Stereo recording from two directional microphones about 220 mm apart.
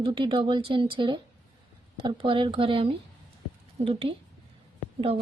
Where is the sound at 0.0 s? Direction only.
25° right (ahead or behind).